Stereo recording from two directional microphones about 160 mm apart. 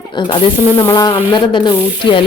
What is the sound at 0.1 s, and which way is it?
Speech, 30° left (ahead or behind).